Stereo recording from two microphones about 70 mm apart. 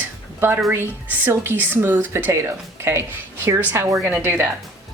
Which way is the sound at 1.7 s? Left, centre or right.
Right.